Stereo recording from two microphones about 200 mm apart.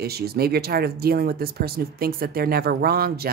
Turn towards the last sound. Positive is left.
turn(degrees=-50)  # may be behind; listen again after turning